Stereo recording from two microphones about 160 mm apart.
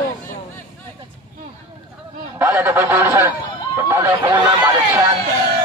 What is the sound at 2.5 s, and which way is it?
Speech, 10° right (ahead or behind).